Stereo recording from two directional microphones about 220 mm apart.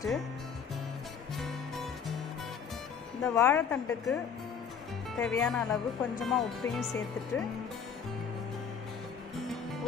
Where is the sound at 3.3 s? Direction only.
10° left (ahead or behind).